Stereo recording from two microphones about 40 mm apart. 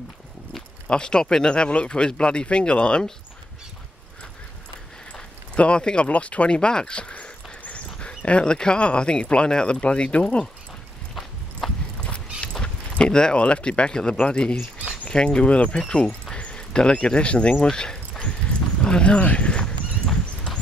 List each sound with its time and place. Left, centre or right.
0.8 s speech: left
5.1 s a sound: left
6.0 s speech: left
7.6 s dog: left
8.3 s speech: left
11.6 s clip-clop: centre
12.4 s speech: left
16.4 s a sound: left